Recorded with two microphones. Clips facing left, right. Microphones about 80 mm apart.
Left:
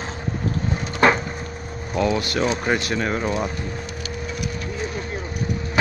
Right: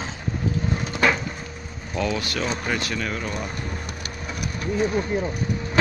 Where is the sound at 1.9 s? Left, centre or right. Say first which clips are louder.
Left 4 dB; centre.